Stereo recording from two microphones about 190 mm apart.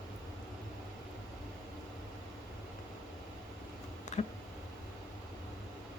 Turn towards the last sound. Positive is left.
turn(degrees=35)  # may be behind; listen again after turning